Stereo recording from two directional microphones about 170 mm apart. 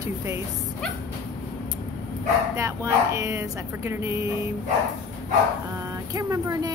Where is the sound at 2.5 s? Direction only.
15° right (ahead or behind).